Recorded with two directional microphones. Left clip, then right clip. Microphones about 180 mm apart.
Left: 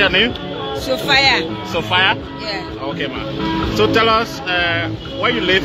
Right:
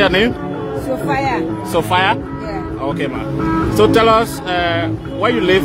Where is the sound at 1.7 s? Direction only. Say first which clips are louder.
Right 1 dB; 35° right (ahead or behind).